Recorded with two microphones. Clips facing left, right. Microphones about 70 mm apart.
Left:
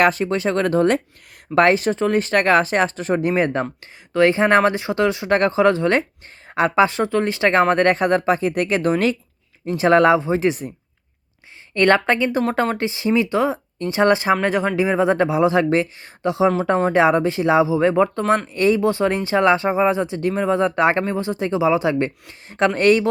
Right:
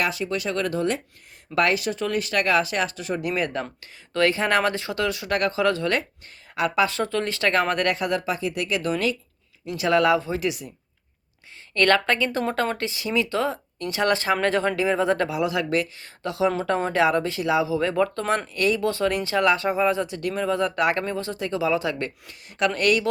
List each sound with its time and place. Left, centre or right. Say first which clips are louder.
0.0 s speech: left 8 dB; left
1.5 s speech: left 7 dB; left
11.7 s speech: left 4 dB; left